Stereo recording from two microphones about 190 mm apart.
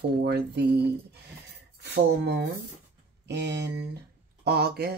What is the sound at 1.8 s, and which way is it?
Speech, 65° right (ahead or behind).